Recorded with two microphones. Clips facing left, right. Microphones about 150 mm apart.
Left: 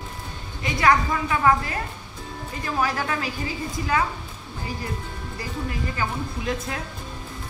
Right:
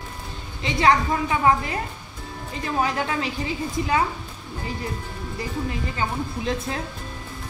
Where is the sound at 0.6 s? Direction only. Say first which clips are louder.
Right 1 dB; 25° right (ahead or behind).